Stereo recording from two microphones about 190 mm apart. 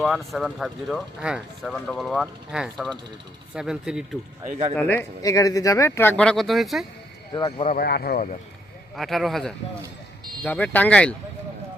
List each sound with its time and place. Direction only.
0.0 s speech: centre (ahead or behind)
4.7 s speech: 10° left (ahead or behind)
7.8 s speech: 55° left (ahead or behind)
9.0 s speech: centre (ahead or behind)